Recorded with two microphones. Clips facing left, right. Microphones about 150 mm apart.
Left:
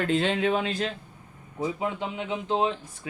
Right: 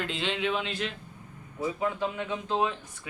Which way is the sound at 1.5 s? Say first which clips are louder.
Left 1 dB; 20° left (ahead or behind).